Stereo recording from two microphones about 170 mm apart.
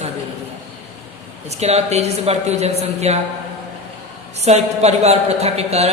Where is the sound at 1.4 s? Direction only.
40° right (ahead or behind).